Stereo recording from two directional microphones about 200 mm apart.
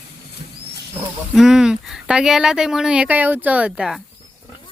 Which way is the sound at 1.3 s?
Centre (ahead or behind).